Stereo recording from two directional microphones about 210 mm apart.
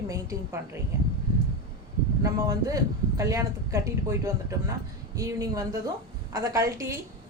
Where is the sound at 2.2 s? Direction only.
15° right (ahead or behind).